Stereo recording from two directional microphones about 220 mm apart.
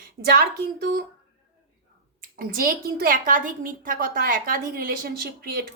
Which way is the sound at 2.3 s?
40° right (ahead or behind).